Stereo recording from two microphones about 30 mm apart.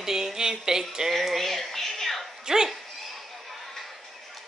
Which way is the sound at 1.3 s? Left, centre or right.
Centre.